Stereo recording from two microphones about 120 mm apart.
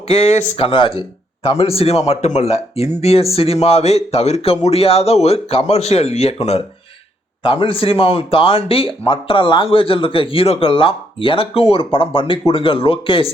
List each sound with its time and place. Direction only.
0.1 s a man's voice: 55° left (ahead or behind)
7.4 s speech: 45° left (ahead or behind)